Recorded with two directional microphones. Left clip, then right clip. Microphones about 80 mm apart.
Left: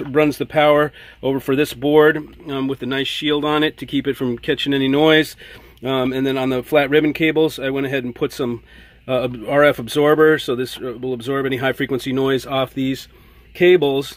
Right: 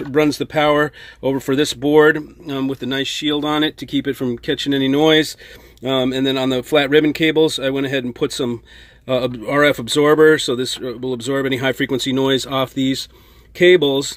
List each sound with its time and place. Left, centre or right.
0.1 s speech: centre
5.8 s speech: centre